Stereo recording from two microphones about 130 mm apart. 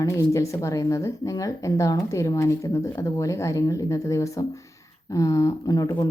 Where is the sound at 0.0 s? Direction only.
25° left (ahead or behind).